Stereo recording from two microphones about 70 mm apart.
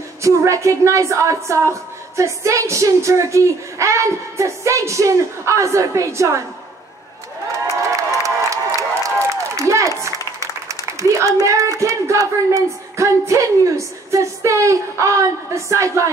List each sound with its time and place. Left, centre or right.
0.2 s a woman's voice: right
7.9 s crowd: right
9.0 s applause: right
11.4 s a woman's voice: right